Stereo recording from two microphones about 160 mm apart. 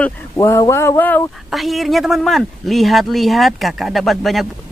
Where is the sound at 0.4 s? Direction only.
20° left (ahead or behind).